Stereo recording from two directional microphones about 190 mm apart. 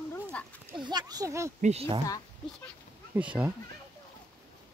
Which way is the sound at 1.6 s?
35° right (ahead or behind).